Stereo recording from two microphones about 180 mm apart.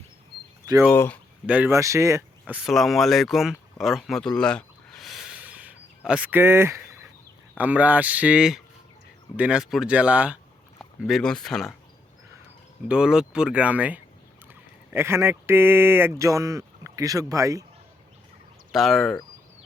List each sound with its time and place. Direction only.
0.6 s a sound: 15° right (ahead or behind)
0.9 s speech: 10° left (ahead or behind)
1.5 s speech: 10° right (ahead or behind)
2.4 s speech: centre (ahead or behind)
3.8 s a sound: centre (ahead or behind)
7.5 s speech: 10° right (ahead or behind)
12.9 s speech: 5° right (ahead or behind)
18.7 s speech: centre (ahead or behind)